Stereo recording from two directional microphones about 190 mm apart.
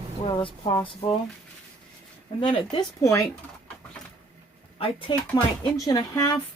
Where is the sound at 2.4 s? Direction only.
25° left (ahead or behind).